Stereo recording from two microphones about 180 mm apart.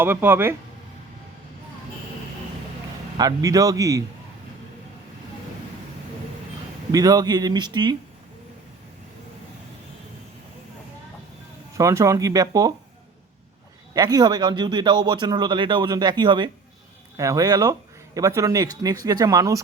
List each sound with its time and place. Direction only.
0.0 s speech: 10° right (ahead or behind)
3.2 s speech: 20° right (ahead or behind)
6.9 s speech: 20° right (ahead or behind)
11.8 s speech: 20° right (ahead or behind)
13.9 s speech: 20° right (ahead or behind)